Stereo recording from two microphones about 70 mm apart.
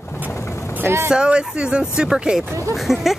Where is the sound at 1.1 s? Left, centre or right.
Centre.